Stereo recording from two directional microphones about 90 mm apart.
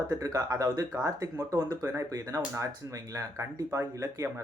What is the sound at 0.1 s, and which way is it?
Speech, 40° right (ahead or behind).